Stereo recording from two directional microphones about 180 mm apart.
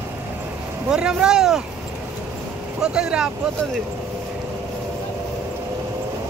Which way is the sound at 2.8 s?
5° right (ahead or behind).